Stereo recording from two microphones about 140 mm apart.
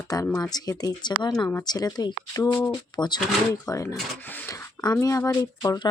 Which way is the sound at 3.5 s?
20° left (ahead or behind).